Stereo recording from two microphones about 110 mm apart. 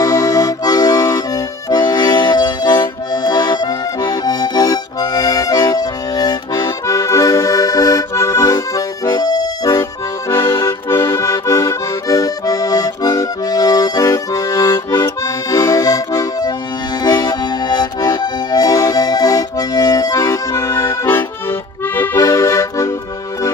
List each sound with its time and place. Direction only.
0.0 s accordion: 30° left (ahead or behind)